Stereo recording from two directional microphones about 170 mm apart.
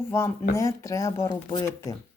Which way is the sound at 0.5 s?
20° left (ahead or behind).